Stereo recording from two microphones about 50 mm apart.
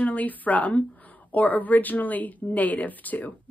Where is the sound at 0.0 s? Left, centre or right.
Left.